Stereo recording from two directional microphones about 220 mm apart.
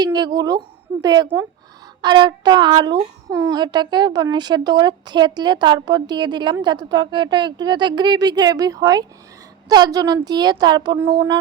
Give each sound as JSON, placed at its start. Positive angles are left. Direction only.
{"t": 0.0, "sound": "a woman's voice", "side_deg": -20}